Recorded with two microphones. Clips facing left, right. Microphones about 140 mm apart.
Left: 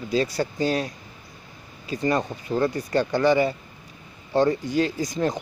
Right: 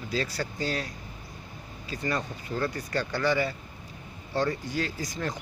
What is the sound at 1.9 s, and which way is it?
Speech, 20° left (ahead or behind).